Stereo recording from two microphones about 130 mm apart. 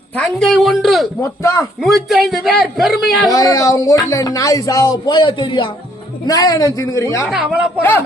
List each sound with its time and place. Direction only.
0.2 s a man's voice: 5° left (ahead or behind)
1.2 s speech: 25° left (ahead or behind)
1.8 s a man's voice: centre (ahead or behind)
3.3 s speech: 25° left (ahead or behind)
6.2 s speech: 30° left (ahead or behind)
7.3 s speech: 5° right (ahead or behind)
7.8 s speech: 15° left (ahead or behind)